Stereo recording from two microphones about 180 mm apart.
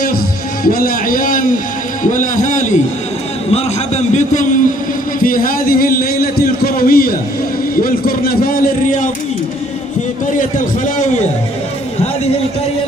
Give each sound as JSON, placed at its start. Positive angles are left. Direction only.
{"t": 0.7, "sound": "a man's voice", "side_deg": 50}